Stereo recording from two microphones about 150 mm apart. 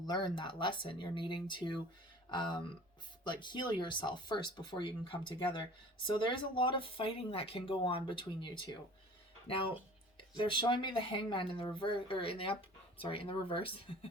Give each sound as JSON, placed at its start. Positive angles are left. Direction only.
{"t": 0.0, "sound": "speech", "side_deg": 30}
{"t": 10.2, "sound": "speech", "side_deg": 35}